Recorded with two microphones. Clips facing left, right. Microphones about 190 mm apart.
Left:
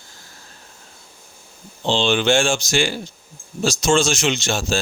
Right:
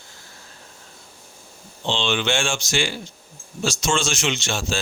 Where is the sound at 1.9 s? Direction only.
40° left (ahead or behind).